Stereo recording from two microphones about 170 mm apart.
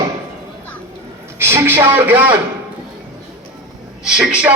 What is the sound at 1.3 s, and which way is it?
A woman's voice, 15° right (ahead or behind).